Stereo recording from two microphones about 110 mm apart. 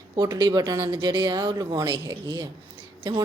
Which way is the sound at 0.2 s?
35° right (ahead or behind).